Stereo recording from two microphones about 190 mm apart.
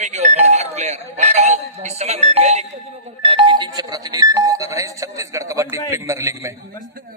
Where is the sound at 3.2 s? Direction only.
25° right (ahead or behind).